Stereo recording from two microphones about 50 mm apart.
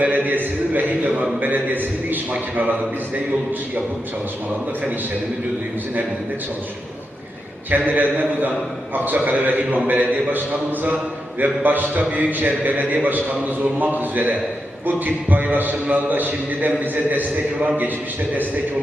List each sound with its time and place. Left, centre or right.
0.0 s a man's voice: right
7.7 s a man's voice: right